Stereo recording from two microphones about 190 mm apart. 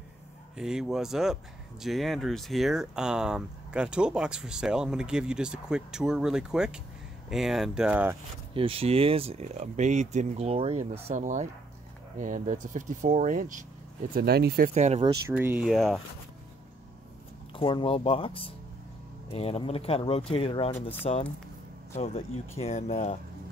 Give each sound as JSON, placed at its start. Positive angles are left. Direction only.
{"t": 0.6, "sound": "speech", "side_deg": -5}
{"t": 8.5, "sound": "speech", "side_deg": -30}
{"t": 14.1, "sound": "speech", "side_deg": -55}
{"t": 14.7, "sound": "speech", "side_deg": -35}
{"t": 15.2, "sound": "speech", "side_deg": -10}
{"t": 15.7, "sound": "speech", "side_deg": 0}
{"t": 17.6, "sound": "speech", "side_deg": 25}